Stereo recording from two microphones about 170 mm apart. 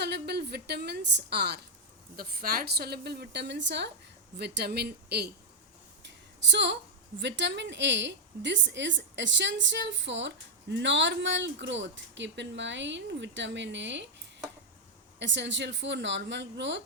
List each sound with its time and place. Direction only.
0.0 s a woman's voice: 75° right (ahead or behind)
2.1 s a woman's voice: 60° right (ahead or behind); by 3.8 s 90° right
4.4 s a woman's voice: 80° right
6.5 s a woman's voice: 90° right
15.2 s a woman's voice: 90° right